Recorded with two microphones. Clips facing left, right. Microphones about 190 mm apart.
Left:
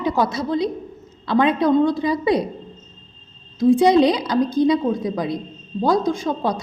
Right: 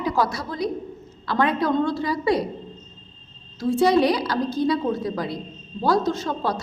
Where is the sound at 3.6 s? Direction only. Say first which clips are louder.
Left 5 dB; 15° left (ahead or behind).